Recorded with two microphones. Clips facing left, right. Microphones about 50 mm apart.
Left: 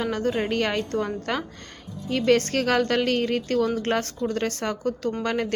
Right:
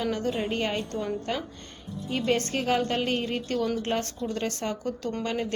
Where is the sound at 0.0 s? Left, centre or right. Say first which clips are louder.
Left 3 dB; left.